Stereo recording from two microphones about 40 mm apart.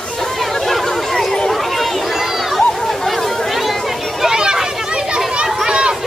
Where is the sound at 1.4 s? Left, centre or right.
Centre.